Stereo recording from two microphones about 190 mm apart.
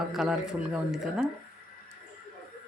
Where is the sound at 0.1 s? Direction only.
Centre (ahead or behind).